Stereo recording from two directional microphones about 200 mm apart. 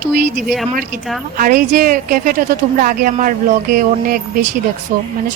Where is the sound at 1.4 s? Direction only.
40° right (ahead or behind).